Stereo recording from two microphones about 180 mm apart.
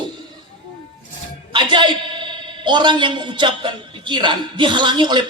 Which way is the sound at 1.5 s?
25° right (ahead or behind).